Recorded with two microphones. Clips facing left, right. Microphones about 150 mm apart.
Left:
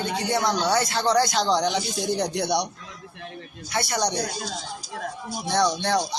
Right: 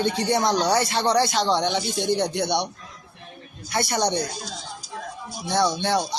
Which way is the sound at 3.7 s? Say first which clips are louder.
Right 2 dB; 30° right (ahead or behind).